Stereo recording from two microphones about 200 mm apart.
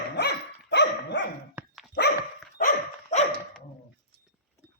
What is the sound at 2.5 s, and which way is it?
Dog, 40° left (ahead or behind).